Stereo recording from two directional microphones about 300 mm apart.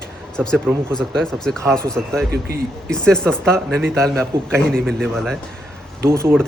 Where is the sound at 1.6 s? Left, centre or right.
Centre.